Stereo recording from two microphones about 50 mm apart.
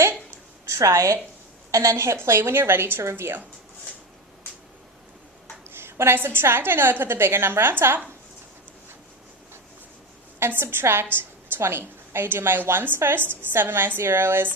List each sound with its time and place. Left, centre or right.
0.7 s a woman's voice: right
2.2 s a woman's voice: right
5.6 s a sound: right
6.1 s a woman's voice: right
10.4 s a woman's voice: right